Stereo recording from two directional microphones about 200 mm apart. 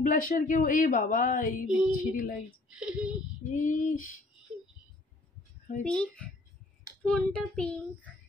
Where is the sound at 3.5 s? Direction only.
40° left (ahead or behind).